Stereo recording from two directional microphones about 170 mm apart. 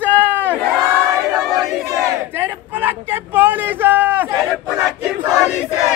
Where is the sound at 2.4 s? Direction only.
10° right (ahead or behind).